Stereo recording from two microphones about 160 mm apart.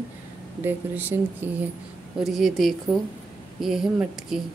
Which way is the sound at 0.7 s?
10° right (ahead or behind).